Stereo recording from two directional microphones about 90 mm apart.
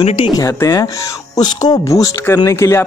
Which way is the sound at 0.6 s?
35° left (ahead or behind).